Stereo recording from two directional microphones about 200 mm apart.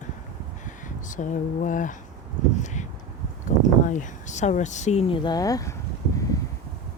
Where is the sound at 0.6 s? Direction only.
40° left (ahead or behind).